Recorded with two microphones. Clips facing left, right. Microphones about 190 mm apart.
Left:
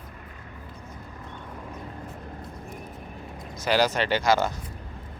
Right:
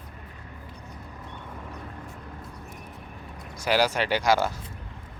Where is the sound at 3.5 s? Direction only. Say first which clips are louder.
Left 1 dB; 10° right (ahead or behind).